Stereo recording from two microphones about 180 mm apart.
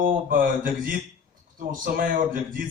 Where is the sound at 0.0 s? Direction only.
50° right (ahead or behind).